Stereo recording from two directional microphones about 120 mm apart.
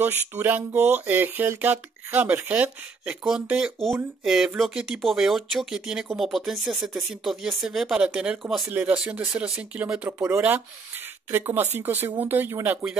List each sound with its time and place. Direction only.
0.0 s speech: 15° right (ahead or behind)